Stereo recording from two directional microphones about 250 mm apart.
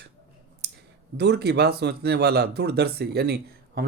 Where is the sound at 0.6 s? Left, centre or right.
Right.